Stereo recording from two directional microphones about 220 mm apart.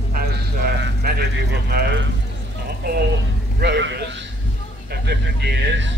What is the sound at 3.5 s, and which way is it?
Speech, 50° right (ahead or behind).